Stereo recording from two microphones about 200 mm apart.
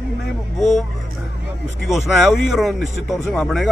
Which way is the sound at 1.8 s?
Centre (ahead or behind).